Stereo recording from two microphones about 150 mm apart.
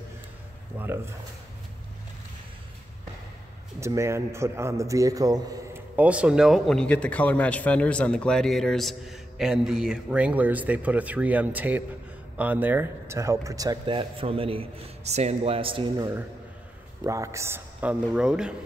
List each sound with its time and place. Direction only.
0.7 s a man's voice: 15° right (ahead or behind)
3.8 s a man's voice: 20° right (ahead or behind)
5.9 s a man's voice: 10° right (ahead or behind); by 16.1 s 35° right (ahead or behind)
17.0 s a man's voice: 20° right (ahead or behind)